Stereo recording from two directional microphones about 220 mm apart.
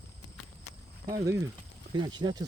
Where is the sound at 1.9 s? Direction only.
20° right (ahead or behind).